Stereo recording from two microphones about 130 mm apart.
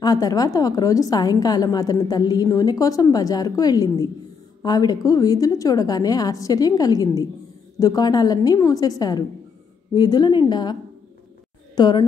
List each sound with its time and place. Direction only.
0.0 s a woman's voice: 30° left (ahead or behind)